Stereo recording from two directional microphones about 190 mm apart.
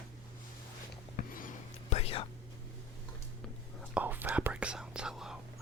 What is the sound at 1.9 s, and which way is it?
Whispering, 30° left (ahead or behind).